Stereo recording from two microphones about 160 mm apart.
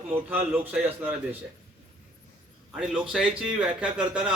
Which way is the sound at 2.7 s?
5° right (ahead or behind).